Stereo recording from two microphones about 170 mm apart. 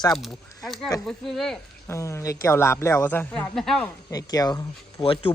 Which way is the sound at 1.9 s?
15° left (ahead or behind).